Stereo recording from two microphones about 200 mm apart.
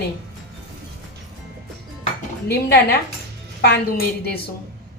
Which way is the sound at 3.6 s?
55° left (ahead or behind).